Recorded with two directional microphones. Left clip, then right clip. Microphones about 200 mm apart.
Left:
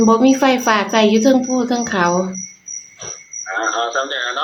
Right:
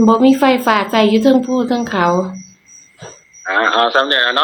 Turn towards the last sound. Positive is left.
turn(degrees=-55)  # may be behind; listen again after turning